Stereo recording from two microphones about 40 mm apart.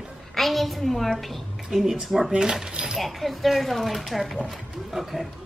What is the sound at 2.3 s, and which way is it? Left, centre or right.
Speech, centre.